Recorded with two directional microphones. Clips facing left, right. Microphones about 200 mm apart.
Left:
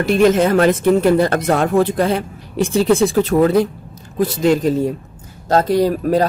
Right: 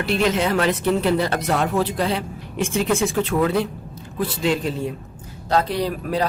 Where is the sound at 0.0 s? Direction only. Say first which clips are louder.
Left 7 dB; 45° left (ahead or behind).